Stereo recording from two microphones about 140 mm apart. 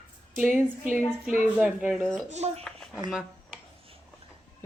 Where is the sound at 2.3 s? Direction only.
50° right (ahead or behind).